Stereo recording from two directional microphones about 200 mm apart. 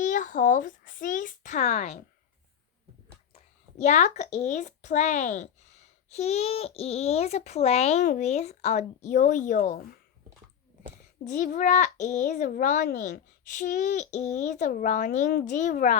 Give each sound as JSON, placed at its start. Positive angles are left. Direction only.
{"t": 0.0, "sound": "a child's voice", "side_deg": 40}
{"t": 3.8, "sound": "speech", "side_deg": 35}
{"t": 11.3, "sound": "speech", "side_deg": 40}